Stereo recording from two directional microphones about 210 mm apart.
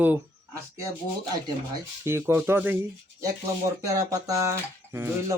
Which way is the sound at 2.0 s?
10° right (ahead or behind).